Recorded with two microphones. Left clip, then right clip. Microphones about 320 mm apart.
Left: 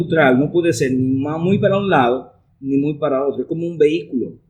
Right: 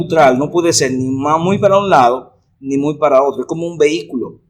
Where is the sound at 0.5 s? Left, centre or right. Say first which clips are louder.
Right 3 dB; centre.